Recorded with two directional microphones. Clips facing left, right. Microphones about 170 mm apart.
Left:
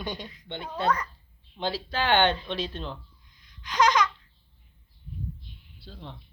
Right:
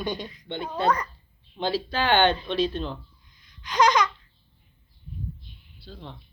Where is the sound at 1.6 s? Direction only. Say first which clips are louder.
Right 3 dB; 20° left (ahead or behind).